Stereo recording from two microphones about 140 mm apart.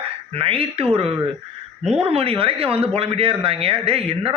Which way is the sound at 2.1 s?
40° right (ahead or behind).